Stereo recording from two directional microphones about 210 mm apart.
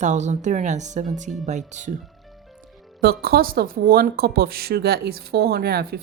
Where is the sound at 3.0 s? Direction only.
50° right (ahead or behind).